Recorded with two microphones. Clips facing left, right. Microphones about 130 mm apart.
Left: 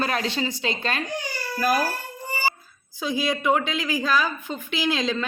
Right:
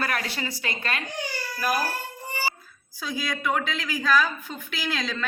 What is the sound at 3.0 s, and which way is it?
Speech, 25° left (ahead or behind).